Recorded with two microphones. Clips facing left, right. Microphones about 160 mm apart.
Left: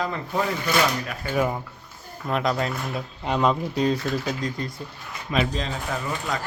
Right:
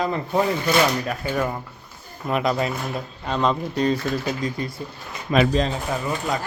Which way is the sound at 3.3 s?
10° left (ahead or behind).